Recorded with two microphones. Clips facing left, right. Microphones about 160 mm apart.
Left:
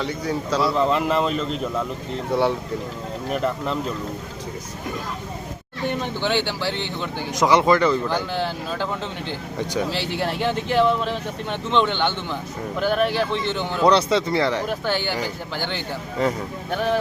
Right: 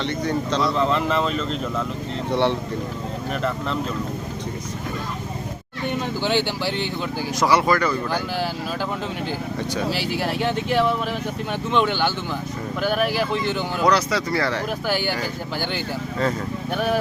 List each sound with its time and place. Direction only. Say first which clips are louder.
0.0 s speech: right 2 dB; 5° left (ahead or behind)
5.9 s speech: right 1 dB; 5° right (ahead or behind)
7.3 s speech: left 2 dB; 20° left (ahead or behind)
9.9 s speech: right 1 dB; 10° right (ahead or behind)
13.8 s speech: left 3 dB; 25° left (ahead or behind)
14.7 s speech: even; 10° right (ahead or behind)
16.2 s speech: left 1 dB; 15° left (ahead or behind)